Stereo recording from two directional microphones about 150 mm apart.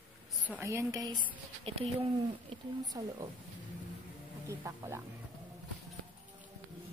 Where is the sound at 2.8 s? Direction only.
25° right (ahead or behind).